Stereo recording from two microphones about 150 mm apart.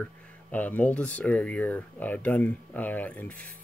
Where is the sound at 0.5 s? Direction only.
10° left (ahead or behind).